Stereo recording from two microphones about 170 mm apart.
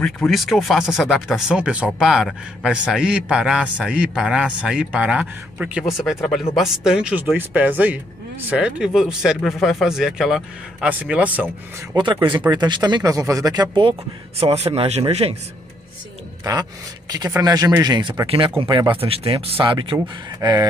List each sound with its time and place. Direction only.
0.0 s speech: centre (ahead or behind)
11.9 s speech: 30° right (ahead or behind)
14.4 s speech: 35° right (ahead or behind)
16.5 s speech: 20° right (ahead or behind)